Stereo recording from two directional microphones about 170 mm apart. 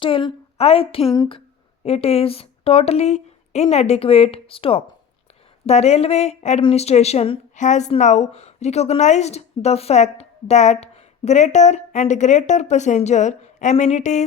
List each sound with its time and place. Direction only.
0.0 s a woman's voice: 30° left (ahead or behind)